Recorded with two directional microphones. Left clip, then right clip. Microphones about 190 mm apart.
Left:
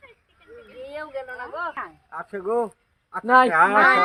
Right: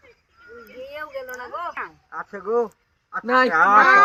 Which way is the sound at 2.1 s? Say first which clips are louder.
Right 2 dB; 45° left (ahead or behind).